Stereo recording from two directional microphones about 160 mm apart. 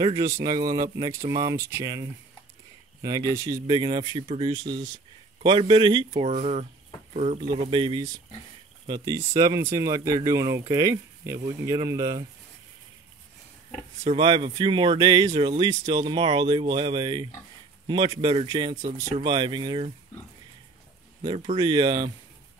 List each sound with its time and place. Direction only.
0.0 s speech: 20° right (ahead or behind)
14.0 s speech: 30° right (ahead or behind)
21.2 s speech: 30° right (ahead or behind)